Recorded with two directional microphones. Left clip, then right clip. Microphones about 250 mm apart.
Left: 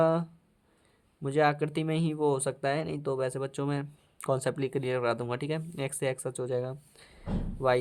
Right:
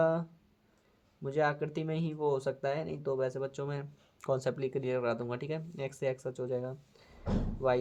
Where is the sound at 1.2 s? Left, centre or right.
Left.